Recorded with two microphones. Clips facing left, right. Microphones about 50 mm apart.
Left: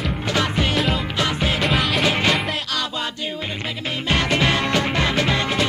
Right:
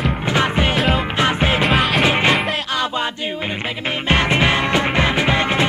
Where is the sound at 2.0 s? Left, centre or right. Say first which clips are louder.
Right 3 dB; right.